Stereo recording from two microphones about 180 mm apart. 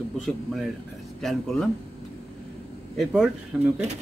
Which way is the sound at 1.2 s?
Centre (ahead or behind).